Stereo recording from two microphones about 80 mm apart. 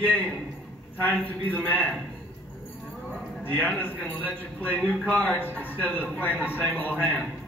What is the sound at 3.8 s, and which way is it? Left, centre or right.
A man's voice, left.